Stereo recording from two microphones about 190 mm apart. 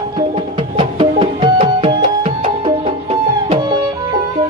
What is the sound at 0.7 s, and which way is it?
Music, 30° right (ahead or behind).